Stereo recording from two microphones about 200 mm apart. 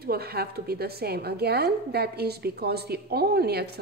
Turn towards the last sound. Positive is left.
turn(degrees=-50)  # may be behind; listen again after turning